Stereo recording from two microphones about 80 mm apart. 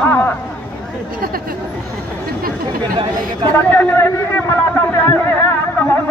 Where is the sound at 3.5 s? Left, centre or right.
Left.